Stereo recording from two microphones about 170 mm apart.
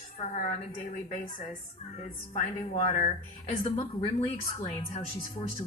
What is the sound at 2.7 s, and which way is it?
Speech, 45° left (ahead or behind).